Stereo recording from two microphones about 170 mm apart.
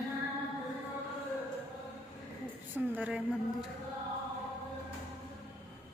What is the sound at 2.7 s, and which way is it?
Speech, 10° right (ahead or behind).